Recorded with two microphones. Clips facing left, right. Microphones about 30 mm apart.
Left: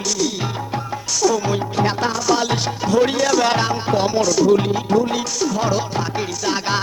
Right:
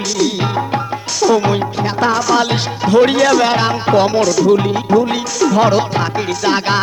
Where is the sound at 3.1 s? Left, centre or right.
Right.